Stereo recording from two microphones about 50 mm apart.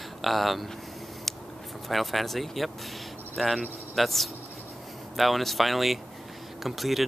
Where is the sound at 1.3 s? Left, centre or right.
Centre.